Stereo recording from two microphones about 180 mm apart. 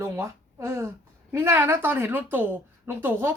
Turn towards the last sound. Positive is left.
turn(degrees=-15)  # may be behind; listen again after turning